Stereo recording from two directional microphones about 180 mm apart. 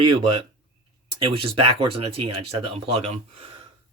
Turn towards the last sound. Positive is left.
turn(degrees=-35)  # may be behind; listen again after turning